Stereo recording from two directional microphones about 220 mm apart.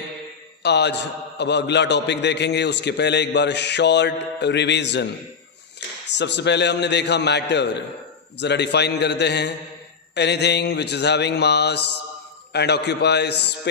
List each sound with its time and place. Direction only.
0.6 s a man's voice: 50° left (ahead or behind)
6.1 s a man's voice: 50° left (ahead or behind)